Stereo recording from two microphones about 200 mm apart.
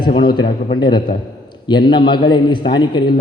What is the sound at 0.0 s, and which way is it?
A man's voice, 25° left (ahead or behind).